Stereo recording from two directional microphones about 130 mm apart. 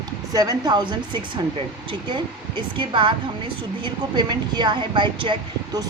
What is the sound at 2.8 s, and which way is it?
A woman's voice, 40° right (ahead or behind).